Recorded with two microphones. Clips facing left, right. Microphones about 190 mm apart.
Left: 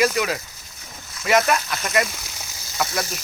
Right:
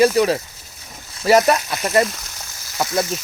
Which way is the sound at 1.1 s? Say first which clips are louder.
Right 5 dB; 35° right (ahead or behind).